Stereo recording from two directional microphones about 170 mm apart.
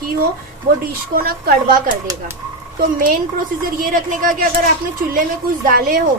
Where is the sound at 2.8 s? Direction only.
55° right (ahead or behind).